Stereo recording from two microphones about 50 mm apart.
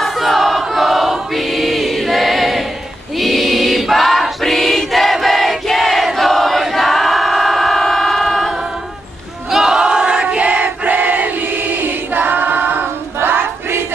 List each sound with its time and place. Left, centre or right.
0.0 s choir: centre
9.5 s battle cry: centre; by 13.7 s right